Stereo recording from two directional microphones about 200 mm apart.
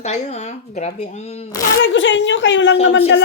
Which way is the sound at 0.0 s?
35° left (ahead or behind).